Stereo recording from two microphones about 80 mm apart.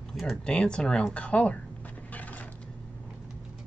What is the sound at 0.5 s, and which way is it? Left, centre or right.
Speech, centre.